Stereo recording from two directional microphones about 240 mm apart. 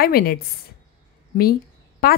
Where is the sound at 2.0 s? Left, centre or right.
Left.